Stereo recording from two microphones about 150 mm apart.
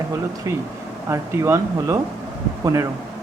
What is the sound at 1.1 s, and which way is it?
Speech, 20° right (ahead or behind).